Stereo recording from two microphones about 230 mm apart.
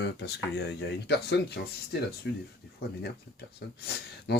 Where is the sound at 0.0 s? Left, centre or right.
Left.